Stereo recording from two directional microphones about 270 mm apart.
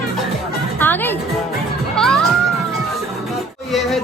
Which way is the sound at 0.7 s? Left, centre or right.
Centre.